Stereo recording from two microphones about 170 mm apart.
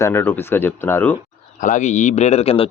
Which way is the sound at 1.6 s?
45° left (ahead or behind).